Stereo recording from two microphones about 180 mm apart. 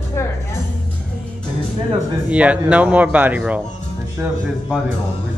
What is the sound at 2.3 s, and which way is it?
Speech, 5° right (ahead or behind).